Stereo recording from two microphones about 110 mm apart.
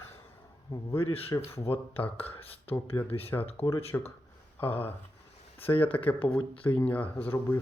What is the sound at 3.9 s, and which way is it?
Speech, 20° left (ahead or behind).